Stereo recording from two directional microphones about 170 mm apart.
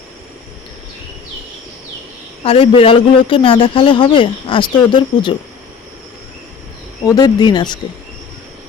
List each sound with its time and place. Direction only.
2.4 s speech: 35° left (ahead or behind)
7.0 s speech: 25° left (ahead or behind)